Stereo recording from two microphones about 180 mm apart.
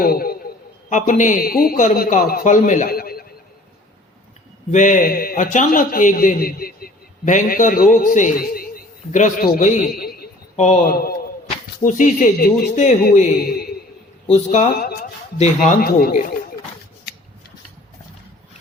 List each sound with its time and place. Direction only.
0.0 s a sound: 55° left (ahead or behind)
0.9 s a man's voice: 45° left (ahead or behind)
4.7 s a man's voice: 45° left (ahead or behind)
10.6 s speech: 40° left (ahead or behind)
10.9 s a man's voice: 55° left (ahead or behind)
11.8 s a man's voice: 45° left (ahead or behind)
14.3 s speech: 40° left (ahead or behind)
15.8 s a man's voice: 55° left (ahead or behind)